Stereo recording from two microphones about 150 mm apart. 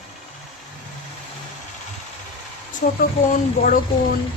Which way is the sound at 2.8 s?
60° left (ahead or behind).